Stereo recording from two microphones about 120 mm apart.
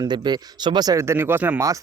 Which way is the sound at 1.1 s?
20° right (ahead or behind).